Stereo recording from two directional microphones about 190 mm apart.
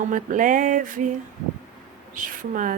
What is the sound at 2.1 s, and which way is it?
Speech, 45° right (ahead or behind).